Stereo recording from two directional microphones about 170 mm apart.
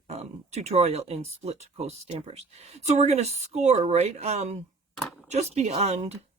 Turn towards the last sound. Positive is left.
turn(degrees=-40)  # may be behind; listen again after turning